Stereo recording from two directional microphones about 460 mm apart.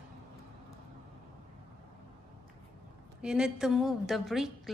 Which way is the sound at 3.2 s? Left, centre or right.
Centre.